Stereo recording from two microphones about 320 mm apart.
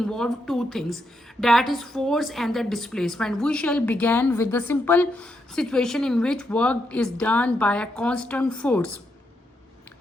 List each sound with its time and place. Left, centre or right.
0.0 s a woman's voice: centre